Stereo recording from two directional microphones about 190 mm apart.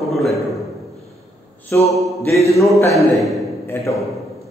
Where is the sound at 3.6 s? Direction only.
15° left (ahead or behind).